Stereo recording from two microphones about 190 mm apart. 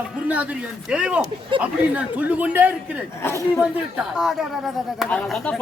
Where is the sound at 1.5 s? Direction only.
25° right (ahead or behind).